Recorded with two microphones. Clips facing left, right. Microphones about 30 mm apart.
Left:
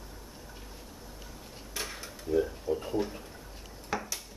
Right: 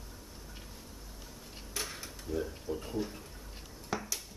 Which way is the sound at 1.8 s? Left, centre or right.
Centre.